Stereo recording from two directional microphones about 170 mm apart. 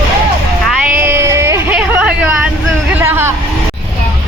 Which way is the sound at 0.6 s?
10° right (ahead or behind).